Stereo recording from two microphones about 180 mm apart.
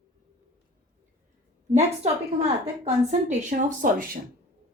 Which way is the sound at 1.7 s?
35° right (ahead or behind).